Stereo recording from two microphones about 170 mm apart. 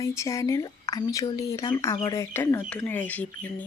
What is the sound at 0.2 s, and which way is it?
Speech, 20° left (ahead or behind).